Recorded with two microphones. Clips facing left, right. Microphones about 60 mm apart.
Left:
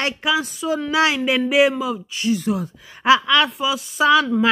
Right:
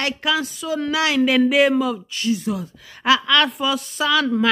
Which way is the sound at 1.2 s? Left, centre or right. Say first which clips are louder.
Right 1 dB; centre.